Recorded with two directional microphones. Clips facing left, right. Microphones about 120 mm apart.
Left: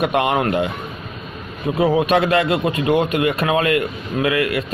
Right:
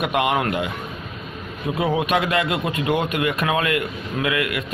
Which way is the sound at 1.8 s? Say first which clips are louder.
Left 5 dB; 35° left (ahead or behind).